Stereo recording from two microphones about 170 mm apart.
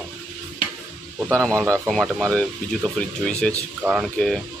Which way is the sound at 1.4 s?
5° left (ahead or behind).